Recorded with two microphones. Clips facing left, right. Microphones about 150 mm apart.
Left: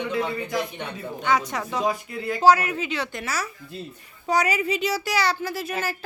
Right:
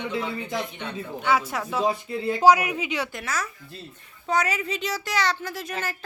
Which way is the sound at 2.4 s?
10° right (ahead or behind).